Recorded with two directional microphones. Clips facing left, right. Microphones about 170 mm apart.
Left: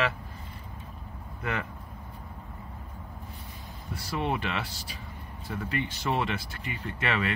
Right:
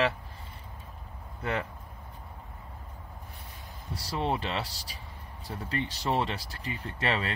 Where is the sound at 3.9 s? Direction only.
35° right (ahead or behind).